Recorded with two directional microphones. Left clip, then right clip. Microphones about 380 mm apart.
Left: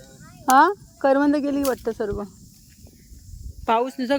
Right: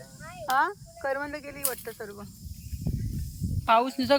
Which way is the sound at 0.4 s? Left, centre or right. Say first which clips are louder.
Left 10 dB; centre.